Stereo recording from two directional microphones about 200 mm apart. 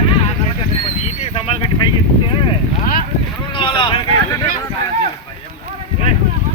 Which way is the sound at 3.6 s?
25° left (ahead or behind).